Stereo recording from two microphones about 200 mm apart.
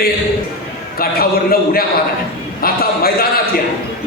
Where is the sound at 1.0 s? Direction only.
50° left (ahead or behind).